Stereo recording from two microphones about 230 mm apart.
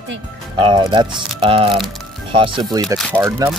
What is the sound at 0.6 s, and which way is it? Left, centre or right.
Speech, right.